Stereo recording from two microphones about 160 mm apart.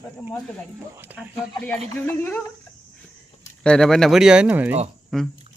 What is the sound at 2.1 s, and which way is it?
Speech, 10° left (ahead or behind).